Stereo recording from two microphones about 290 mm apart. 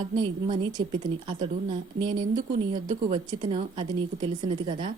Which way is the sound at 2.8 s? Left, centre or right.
Centre.